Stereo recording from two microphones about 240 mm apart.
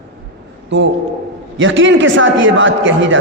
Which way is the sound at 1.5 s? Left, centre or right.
Right.